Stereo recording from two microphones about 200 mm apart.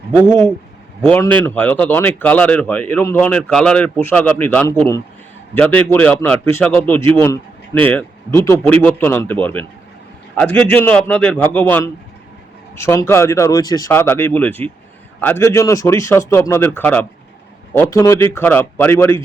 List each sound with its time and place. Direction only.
0.3 s speech: 10° left (ahead or behind)